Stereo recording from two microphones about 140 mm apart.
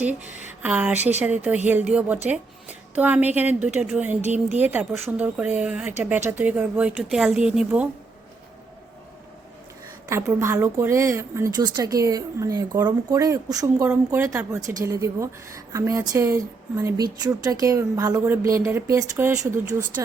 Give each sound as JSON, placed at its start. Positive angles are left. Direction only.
{"t": 0.0, "sound": "speech", "side_deg": -10}
{"t": 10.1, "sound": "speech", "side_deg": -20}